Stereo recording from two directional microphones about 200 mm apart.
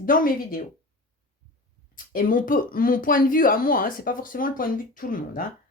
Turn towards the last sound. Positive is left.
turn(degrees=45)  # may be behind; listen again after turning